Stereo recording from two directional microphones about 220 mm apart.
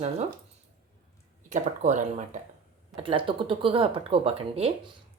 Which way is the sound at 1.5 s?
30° right (ahead or behind).